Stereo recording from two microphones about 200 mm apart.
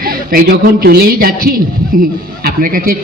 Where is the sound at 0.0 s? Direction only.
45° right (ahead or behind).